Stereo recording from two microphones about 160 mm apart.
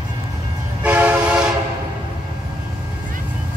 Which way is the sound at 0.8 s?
10° right (ahead or behind).